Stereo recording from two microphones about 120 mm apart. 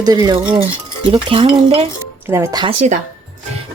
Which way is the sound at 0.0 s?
30° right (ahead or behind).